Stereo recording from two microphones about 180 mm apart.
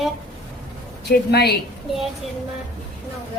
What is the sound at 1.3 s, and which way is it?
Speech, 65° left (ahead or behind).